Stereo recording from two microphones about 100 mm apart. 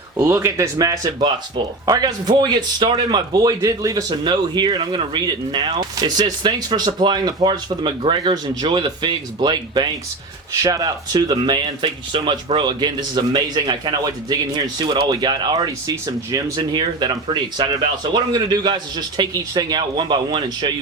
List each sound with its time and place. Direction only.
0.2 s speech: 30° right (ahead or behind)
4.2 s speech: 50° right (ahead or behind)
10.6 s speech: 35° right (ahead or behind)
15.6 s speech: 35° right (ahead or behind)
16.6 s speech: 55° right (ahead or behind)
17.7 s speech: 45° right (ahead or behind)